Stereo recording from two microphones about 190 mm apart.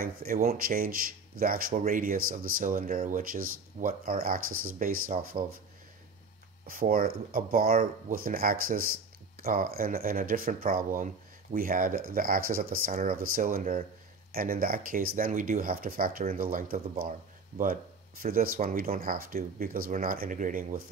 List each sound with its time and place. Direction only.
0.0 s speech: 50° right (ahead or behind)
6.7 s speech: 50° right (ahead or behind)
18.2 s speech: 50° right (ahead or behind)